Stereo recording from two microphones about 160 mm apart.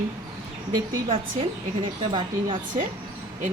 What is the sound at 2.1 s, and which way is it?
Speech, 30° right (ahead or behind).